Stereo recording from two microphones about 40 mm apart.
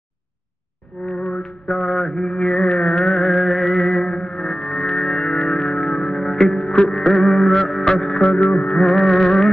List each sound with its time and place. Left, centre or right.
1.0 s music: centre
1.7 s mantra: centre
6.7 s music: left
8.2 s music: left
8.7 s music: centre